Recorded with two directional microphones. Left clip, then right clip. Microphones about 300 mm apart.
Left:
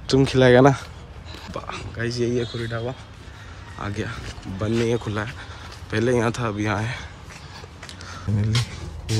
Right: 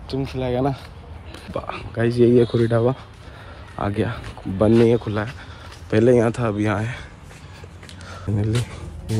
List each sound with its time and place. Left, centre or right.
0.1 s speech: centre
1.5 s speech: centre
8.1 s a sound: centre